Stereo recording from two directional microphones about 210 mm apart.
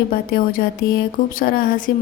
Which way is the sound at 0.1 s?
45° left (ahead or behind).